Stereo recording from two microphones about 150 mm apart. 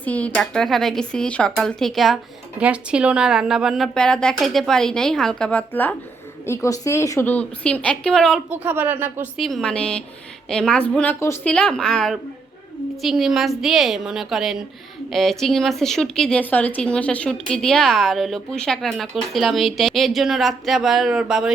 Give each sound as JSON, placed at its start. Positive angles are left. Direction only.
{"t": 0.0, "sound": "a woman's voice", "side_deg": 10}
{"t": 8.4, "sound": "speech", "side_deg": -15}
{"t": 9.4, "sound": "a woman's voice", "side_deg": 0}
{"t": 11.5, "sound": "a woman's voice", "side_deg": 5}